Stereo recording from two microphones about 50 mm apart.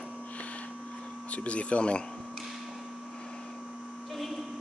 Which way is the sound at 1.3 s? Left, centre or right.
Left.